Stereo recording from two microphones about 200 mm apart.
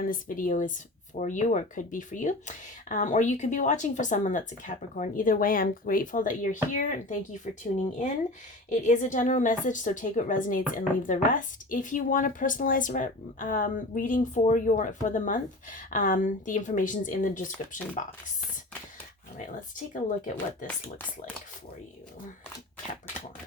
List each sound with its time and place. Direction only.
0.0 s a woman's voice: 45° left (ahead or behind)
8.7 s a woman's voice: 40° left (ahead or behind)
19.4 s a woman's voice: 40° left (ahead or behind)